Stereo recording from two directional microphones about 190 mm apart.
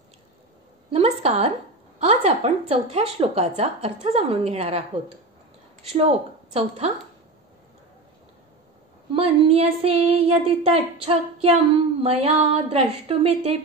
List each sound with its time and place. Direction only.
0.9 s a sound: 30° right (ahead or behind)
2.0 s a woman's voice: 30° right (ahead or behind)
5.9 s a woman's voice: 30° right (ahead or behind)
9.1 s a woman's voice: 30° right (ahead or behind)